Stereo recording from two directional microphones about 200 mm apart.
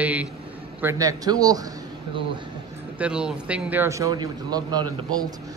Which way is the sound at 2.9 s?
5° right (ahead or behind).